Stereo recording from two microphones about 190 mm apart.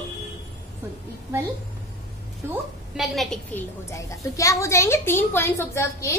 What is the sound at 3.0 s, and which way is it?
Speech, centre (ahead or behind).